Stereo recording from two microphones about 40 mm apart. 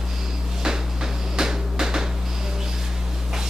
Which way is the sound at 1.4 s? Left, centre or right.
Centre.